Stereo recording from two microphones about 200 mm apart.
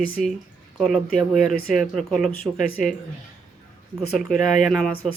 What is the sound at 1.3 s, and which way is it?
Speech, 40° left (ahead or behind).